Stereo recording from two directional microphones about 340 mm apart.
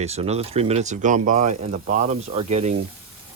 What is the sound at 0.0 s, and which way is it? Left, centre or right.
Speech, centre.